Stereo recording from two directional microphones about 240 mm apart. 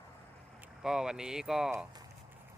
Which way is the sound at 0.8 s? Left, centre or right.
Centre.